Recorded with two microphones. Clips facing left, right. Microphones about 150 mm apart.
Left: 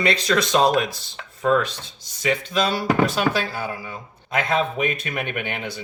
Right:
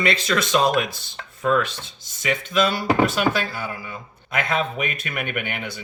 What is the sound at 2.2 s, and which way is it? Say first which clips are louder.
Speech: even; 35° left (ahead or behind).